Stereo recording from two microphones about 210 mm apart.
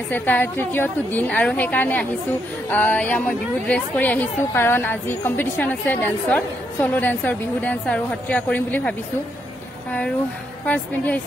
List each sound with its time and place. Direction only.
0.1 s a woman's voice: 10° left (ahead or behind)
10.6 s a woman's voice: 5° left (ahead or behind)